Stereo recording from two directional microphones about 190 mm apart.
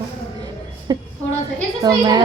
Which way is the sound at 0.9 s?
20° right (ahead or behind).